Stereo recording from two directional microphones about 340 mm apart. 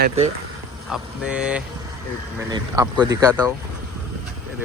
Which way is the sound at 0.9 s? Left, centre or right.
Centre.